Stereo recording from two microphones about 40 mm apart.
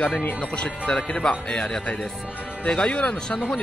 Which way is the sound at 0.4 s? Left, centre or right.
Left.